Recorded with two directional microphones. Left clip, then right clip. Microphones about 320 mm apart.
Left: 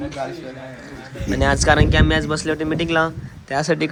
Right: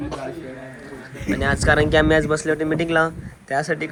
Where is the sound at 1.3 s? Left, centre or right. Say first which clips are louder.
Left 2 dB; centre.